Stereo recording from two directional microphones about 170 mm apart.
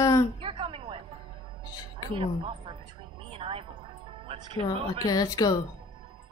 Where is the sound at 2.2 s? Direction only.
30° right (ahead or behind).